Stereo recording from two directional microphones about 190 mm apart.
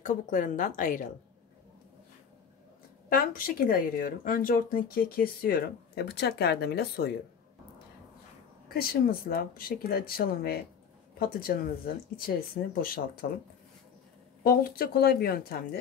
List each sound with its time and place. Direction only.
0.0 s speech: 40° left (ahead or behind)
3.1 s speech: 50° left (ahead or behind)
8.6 s speech: 50° left (ahead or behind)
12.8 s speech: 50° left (ahead or behind)
14.4 s speech: 50° left (ahead or behind)